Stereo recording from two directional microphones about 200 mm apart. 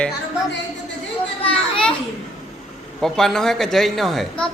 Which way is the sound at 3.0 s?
Centre (ahead or behind).